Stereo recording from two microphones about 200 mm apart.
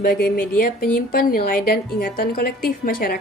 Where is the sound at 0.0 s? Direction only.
45° left (ahead or behind).